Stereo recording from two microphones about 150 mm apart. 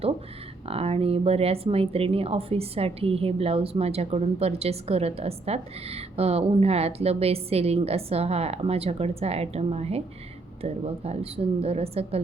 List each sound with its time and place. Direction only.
0.6 s speech: 40° right (ahead or behind)